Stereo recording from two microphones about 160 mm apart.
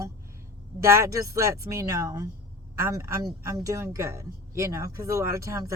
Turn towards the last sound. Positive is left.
turn(degrees=-20)  # may be behind; listen again after turning